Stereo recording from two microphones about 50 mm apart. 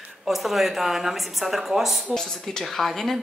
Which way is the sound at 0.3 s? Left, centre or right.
Centre.